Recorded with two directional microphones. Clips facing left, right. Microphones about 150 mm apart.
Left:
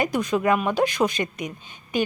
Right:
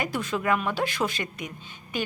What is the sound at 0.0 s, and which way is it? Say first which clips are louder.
Speech: left 6 dB; 15° left (ahead or behind).